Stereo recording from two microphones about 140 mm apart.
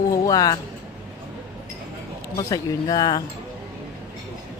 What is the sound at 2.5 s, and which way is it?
Speech, 25° left (ahead or behind).